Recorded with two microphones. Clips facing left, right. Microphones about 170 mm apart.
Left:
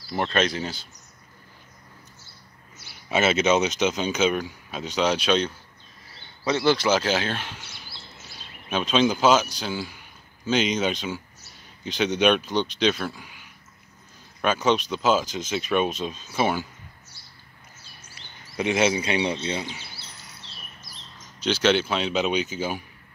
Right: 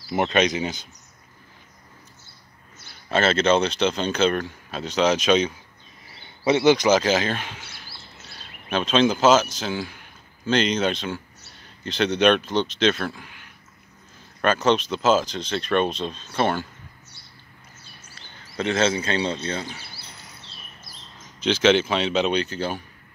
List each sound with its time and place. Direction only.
2.9 s speech: 5° left (ahead or behind)
6.2 s a sound: 20° right (ahead or behind)
7.1 s speech: 5° right (ahead or behind)
18.6 s speech: 15° left (ahead or behind)
20.4 s bird: 55° right (ahead or behind)
21.4 s speech: 5° left (ahead or behind)